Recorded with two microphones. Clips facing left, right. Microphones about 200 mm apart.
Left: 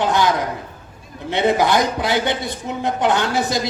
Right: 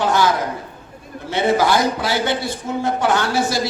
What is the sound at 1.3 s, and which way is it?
A man's voice, 20° left (ahead or behind).